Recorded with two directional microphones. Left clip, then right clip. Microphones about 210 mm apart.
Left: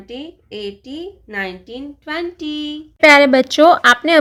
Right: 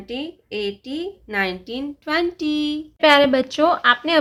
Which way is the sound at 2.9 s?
20° left (ahead or behind).